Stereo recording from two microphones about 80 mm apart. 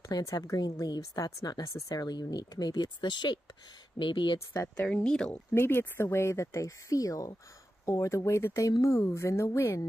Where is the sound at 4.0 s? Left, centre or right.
Left.